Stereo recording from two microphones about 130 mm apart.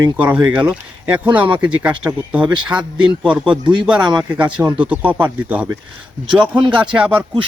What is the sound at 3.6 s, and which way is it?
Speech, 35° right (ahead or behind).